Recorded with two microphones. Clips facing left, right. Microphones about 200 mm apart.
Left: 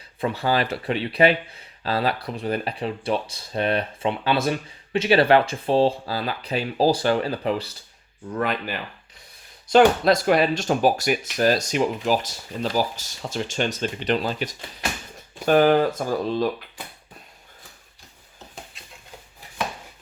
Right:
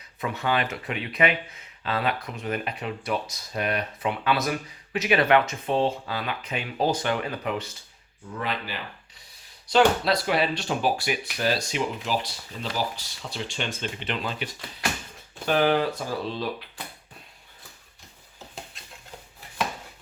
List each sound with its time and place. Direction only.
0.2 s speech: 30° left (ahead or behind)
8.4 s speech: 50° left (ahead or behind)